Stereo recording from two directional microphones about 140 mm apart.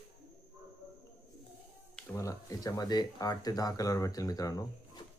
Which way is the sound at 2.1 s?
25° left (ahead or behind).